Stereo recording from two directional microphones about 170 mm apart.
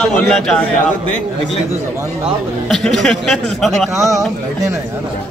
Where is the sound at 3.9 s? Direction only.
20° right (ahead or behind).